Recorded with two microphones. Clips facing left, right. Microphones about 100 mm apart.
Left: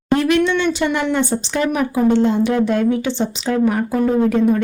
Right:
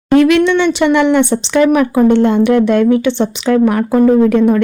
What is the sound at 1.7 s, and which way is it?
Speech, 65° right (ahead or behind).